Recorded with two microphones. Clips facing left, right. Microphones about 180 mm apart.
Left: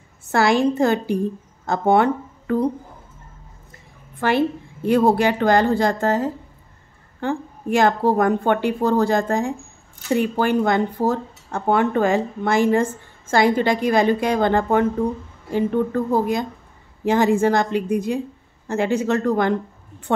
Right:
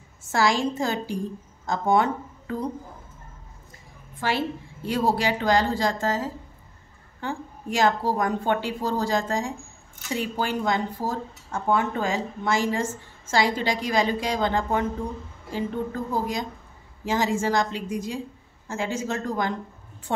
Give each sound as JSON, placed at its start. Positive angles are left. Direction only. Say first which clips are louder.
{"t": 0.3, "sound": "speech", "louder": "left 6 dB", "side_deg": 60}
{"t": 4.2, "sound": "speech", "louder": "left 7 dB", "side_deg": 55}